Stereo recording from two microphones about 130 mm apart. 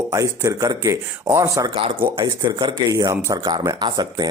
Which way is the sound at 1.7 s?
45° right (ahead or behind).